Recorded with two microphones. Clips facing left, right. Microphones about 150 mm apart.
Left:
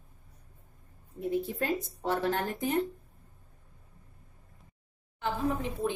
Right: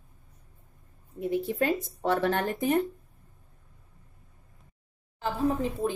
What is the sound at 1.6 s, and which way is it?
Speech, 65° right (ahead or behind).